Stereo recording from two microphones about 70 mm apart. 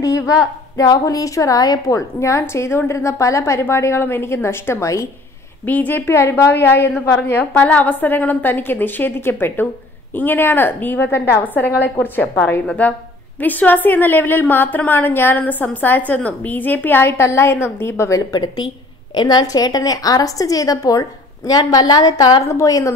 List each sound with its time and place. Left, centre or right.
0.0 s a woman's voice: left
2.0 s a woman's voice: left
5.7 s a woman's voice: left
18.3 s a woman's voice: left
19.1 s a woman's voice: left
22.5 s a woman's voice: left